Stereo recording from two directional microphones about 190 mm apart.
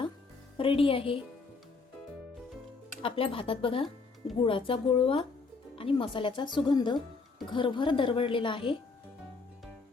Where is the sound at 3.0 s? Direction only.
30° left (ahead or behind).